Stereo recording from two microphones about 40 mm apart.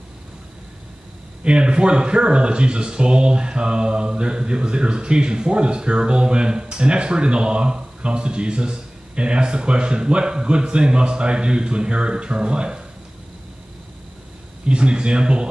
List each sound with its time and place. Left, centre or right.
1.4 s speech: right
14.7 s speech: right